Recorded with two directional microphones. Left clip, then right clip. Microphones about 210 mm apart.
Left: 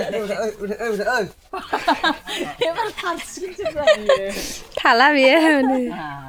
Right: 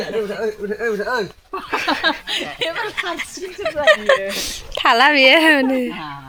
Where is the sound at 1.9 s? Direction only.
55° left (ahead or behind).